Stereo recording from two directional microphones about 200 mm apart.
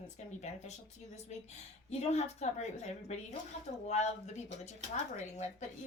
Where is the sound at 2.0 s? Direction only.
35° left (ahead or behind).